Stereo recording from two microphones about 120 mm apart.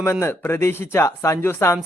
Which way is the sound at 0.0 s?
25° left (ahead or behind).